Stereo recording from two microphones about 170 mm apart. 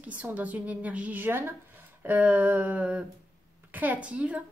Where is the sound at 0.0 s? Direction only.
10° right (ahead or behind).